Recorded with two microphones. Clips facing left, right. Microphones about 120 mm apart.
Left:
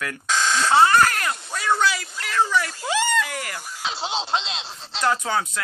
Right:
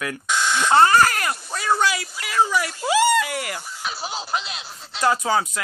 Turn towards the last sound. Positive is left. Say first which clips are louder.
# right 2 dB
turn(degrees=-5)  # may be behind; listen again after turning